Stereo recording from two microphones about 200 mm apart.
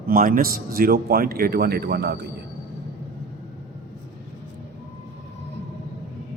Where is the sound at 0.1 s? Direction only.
45° right (ahead or behind).